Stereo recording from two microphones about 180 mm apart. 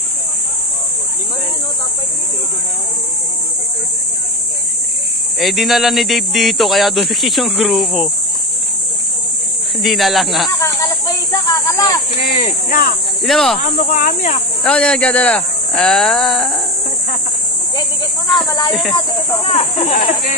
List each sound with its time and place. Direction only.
5.4 s speech: centre (ahead or behind)
9.8 s speech: centre (ahead or behind)
10.8 s speech: 15° left (ahead or behind)
12.6 s speech: 50° left (ahead or behind)
13.2 s speech: centre (ahead or behind)
13.6 s speech: 50° left (ahead or behind)
14.6 s speech: 5° left (ahead or behind)
18.5 s speech: 25° left (ahead or behind)